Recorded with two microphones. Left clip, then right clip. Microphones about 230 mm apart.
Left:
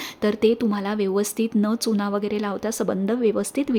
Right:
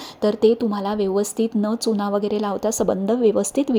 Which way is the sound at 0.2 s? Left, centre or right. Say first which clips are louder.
Right 3 dB; centre.